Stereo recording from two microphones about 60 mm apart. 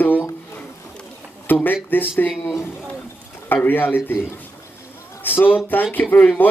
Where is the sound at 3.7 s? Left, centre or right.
Left.